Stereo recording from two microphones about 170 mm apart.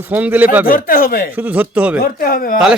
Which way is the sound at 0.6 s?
60° left (ahead or behind).